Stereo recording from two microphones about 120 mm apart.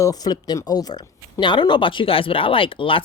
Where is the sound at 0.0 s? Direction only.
30° left (ahead or behind).